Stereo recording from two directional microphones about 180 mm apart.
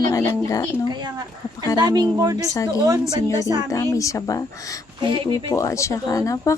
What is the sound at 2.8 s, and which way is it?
Speech, 20° right (ahead or behind).